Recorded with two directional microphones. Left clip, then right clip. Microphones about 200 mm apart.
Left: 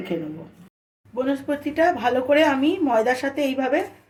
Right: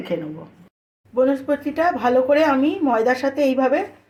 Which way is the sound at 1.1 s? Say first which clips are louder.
Right 6 dB; 30° right (ahead or behind).